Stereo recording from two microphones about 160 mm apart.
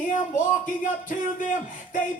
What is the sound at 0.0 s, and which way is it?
Speech, 55° left (ahead or behind).